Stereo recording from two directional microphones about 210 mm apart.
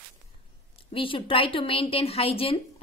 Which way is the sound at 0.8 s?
25° left (ahead or behind).